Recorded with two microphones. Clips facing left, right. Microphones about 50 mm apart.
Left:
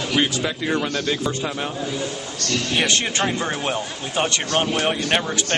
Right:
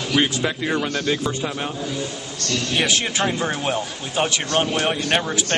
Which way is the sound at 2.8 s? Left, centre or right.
Centre.